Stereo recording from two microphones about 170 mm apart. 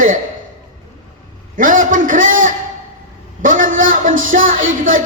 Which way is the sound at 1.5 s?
50° right (ahead or behind).